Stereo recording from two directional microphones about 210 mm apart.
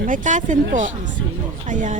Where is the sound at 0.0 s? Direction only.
40° right (ahead or behind).